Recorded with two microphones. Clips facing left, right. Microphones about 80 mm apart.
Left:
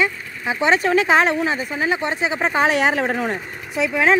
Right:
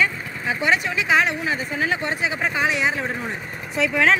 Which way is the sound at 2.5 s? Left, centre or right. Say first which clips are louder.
Left 6 dB; left.